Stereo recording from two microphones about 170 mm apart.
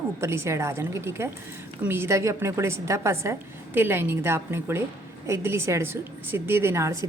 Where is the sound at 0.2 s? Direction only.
15° right (ahead or behind).